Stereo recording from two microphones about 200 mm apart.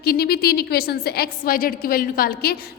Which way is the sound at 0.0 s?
50° left (ahead or behind).